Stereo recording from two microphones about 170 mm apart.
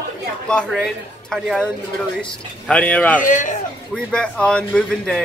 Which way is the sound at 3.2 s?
50° left (ahead or behind).